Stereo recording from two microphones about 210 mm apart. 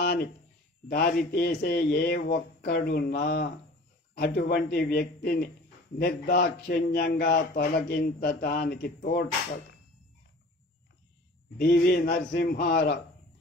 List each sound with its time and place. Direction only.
0.0 s a sound: 50° left (ahead or behind)
0.8 s speech: 45° left (ahead or behind)
11.6 s speech: 50° left (ahead or behind)